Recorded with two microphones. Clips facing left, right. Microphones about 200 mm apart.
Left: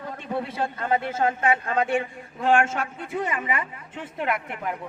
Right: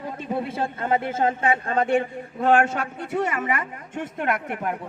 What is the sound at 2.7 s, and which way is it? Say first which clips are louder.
Speech: right 2 dB; 70° right (ahead or behind).